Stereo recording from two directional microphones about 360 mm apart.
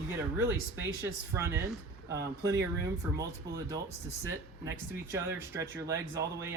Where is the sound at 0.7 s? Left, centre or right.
Centre.